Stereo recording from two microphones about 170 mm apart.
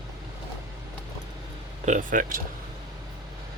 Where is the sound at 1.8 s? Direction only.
50° right (ahead or behind).